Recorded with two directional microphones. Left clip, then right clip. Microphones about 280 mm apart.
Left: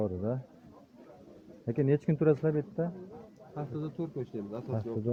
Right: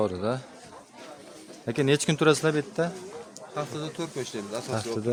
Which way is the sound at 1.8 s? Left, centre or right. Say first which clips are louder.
Right 6 dB; centre.